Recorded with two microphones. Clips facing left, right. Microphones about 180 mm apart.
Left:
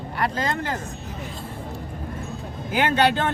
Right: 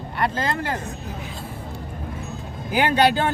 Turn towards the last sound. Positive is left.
turn(degrees=-10)  # may be behind; listen again after turning